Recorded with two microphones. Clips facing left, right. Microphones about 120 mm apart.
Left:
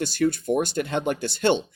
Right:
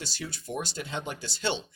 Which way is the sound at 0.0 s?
55° left (ahead or behind).